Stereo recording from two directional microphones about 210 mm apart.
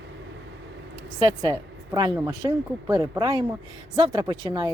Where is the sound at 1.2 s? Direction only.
20° right (ahead or behind).